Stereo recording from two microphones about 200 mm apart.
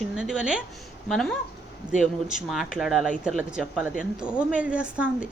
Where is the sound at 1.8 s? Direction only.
40° right (ahead or behind).